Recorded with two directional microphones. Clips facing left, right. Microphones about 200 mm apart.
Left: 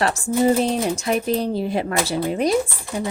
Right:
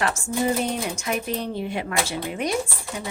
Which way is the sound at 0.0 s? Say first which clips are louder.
Left 5 dB; 35° left (ahead or behind).